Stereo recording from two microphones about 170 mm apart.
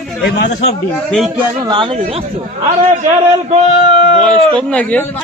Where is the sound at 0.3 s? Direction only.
85° left.